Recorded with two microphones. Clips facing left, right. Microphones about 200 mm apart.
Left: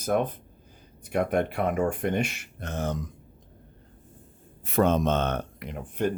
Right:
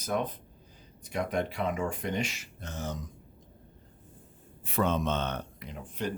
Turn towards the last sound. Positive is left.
turn(degrees=55)  # may be behind; listen again after turning